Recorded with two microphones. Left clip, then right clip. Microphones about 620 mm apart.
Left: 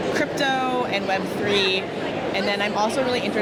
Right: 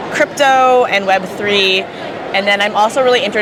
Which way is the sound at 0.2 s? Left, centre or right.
Right.